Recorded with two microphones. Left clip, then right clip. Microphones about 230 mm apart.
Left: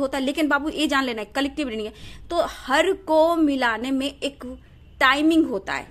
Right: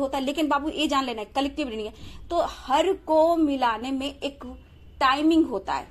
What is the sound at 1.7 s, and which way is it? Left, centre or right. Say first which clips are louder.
A woman's voice: left 3 dB; left.